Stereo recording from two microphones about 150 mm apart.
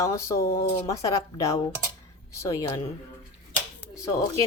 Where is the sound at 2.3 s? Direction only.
20° left (ahead or behind).